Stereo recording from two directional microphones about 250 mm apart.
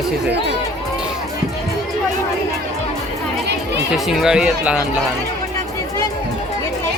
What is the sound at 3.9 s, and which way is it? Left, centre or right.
Speech, centre.